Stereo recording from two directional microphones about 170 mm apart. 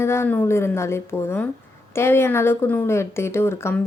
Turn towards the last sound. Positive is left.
turn(degrees=15)  # may be behind; listen again after turning